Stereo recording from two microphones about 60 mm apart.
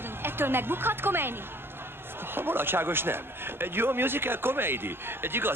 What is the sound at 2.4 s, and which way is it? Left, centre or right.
Speech, right.